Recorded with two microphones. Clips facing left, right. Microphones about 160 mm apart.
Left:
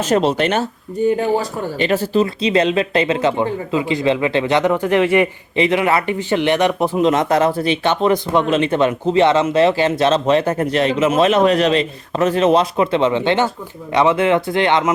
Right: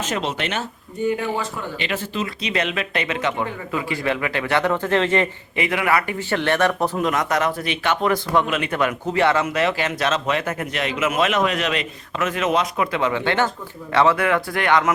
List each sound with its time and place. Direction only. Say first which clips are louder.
0.0 s speech: left 9 dB; 40° left (ahead or behind); by 5.3 s 15° left (ahead or behind)
5.5 s speech: left 5 dB; 25° left (ahead or behind)